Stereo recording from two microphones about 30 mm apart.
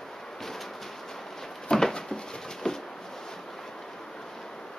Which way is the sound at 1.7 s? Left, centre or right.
Centre.